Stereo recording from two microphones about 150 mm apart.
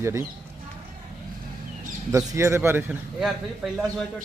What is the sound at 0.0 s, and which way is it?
Speech, 20° right (ahead or behind).